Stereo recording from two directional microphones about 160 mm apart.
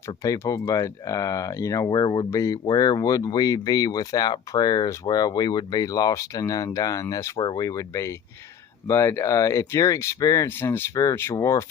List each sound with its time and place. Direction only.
0.1 s speech: 20° left (ahead or behind)